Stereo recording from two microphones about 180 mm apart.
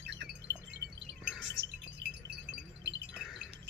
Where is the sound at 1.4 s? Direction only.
85° right.